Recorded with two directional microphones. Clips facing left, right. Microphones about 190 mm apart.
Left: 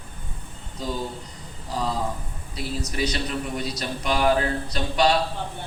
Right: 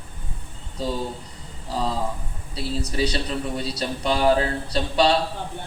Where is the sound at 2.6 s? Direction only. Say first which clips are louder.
Right 3 dB; 30° right (ahead or behind).